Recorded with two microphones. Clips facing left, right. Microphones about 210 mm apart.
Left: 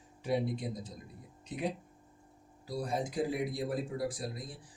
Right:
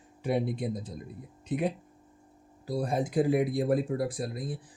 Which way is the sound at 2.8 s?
55° right (ahead or behind).